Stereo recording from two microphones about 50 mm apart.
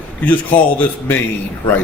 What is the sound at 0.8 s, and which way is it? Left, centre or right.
Speech, left.